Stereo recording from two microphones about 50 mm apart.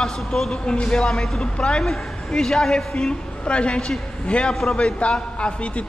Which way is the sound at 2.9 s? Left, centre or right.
Left.